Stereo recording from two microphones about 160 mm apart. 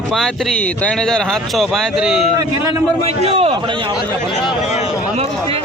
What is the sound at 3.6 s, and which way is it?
Speech, 30° right (ahead or behind).